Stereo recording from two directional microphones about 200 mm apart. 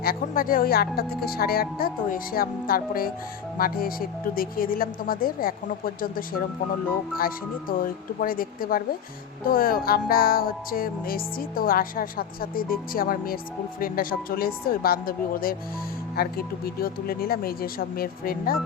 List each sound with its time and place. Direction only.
0.0 s music: 45° left (ahead or behind)